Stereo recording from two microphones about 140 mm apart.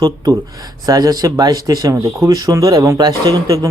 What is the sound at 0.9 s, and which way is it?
Speech, 25° right (ahead or behind).